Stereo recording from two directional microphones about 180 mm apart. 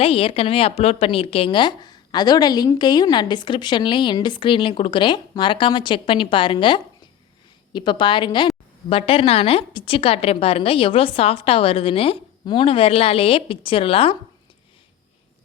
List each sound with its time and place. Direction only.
0.0 s a woman's voice: 30° left (ahead or behind)